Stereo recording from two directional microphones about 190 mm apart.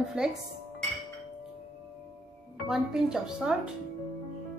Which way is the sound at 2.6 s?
5° right (ahead or behind).